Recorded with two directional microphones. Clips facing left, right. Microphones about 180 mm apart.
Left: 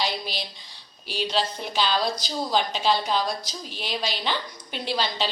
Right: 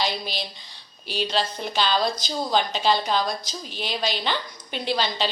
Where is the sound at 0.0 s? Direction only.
5° left (ahead or behind).